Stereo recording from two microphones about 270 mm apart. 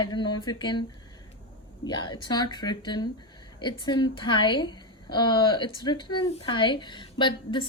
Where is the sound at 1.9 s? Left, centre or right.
Centre.